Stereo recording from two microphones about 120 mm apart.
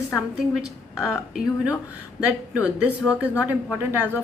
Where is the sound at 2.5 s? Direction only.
10° right (ahead or behind).